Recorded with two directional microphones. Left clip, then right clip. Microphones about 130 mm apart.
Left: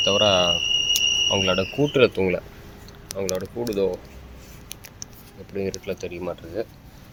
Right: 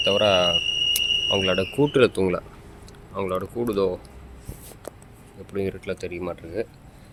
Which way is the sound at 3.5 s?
35° right (ahead or behind).